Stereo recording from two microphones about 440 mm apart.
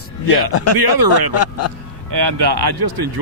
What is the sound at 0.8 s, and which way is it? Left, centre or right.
Speech, right.